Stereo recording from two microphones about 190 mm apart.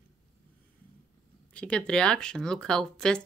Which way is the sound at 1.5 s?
5° left (ahead or behind).